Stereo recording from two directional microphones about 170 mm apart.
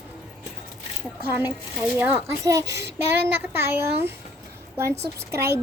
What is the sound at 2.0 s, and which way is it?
A woman's voice, 10° right (ahead or behind).